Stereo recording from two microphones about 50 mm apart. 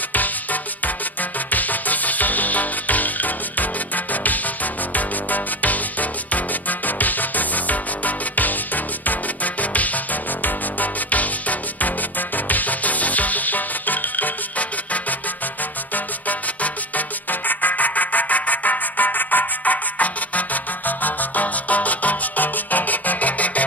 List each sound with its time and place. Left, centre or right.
0.1 s music: left